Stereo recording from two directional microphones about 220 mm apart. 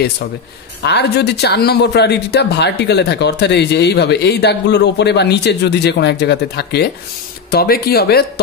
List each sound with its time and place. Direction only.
0.8 s speech: 50° left (ahead or behind)